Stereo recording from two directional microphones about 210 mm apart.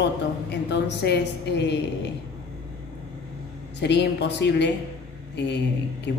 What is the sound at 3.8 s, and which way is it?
Speech, 55° left (ahead or behind).